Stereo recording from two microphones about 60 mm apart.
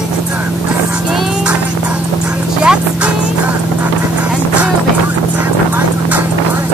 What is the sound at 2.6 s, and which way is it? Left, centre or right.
Music, centre.